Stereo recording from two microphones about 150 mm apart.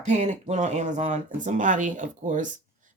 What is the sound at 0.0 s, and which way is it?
Speech, 50° right (ahead or behind).